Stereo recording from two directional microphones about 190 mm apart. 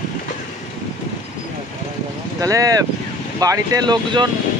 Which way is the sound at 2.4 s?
20° right (ahead or behind).